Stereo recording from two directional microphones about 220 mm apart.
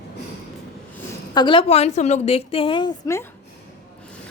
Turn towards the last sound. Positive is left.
turn(degrees=15)  # may be behind; listen again after turning